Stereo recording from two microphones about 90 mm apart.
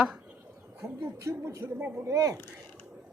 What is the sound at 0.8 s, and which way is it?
Speech, 30° right (ahead or behind).